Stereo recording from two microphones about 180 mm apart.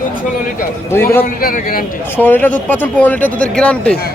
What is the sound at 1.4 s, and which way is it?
Speech, 55° left (ahead or behind).